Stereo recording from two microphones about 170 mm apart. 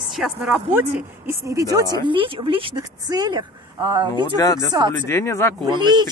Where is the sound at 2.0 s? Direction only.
30° right (ahead or behind).